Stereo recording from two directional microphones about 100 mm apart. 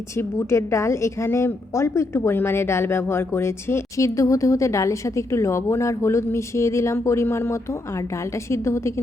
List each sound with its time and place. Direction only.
0.2 s a woman's voice: 30° left (ahead or behind)